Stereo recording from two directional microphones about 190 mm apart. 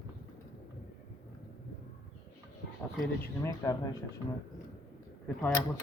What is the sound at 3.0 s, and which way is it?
Speech, 10° left (ahead or behind).